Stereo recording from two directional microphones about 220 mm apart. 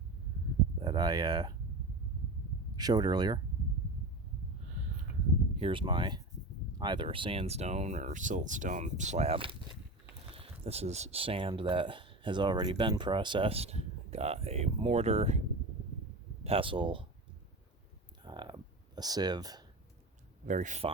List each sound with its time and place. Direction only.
0.8 s speech: 20° right (ahead or behind)
2.7 s speech: 20° right (ahead or behind)
5.5 s speech: 25° right (ahead or behind)
16.4 s speech: 25° right (ahead or behind)
18.3 s a sound: 20° right (ahead or behind)
20.5 s speech: 35° right (ahead or behind)